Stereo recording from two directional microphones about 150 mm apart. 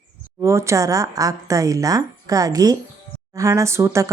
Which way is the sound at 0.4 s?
20° right (ahead or behind).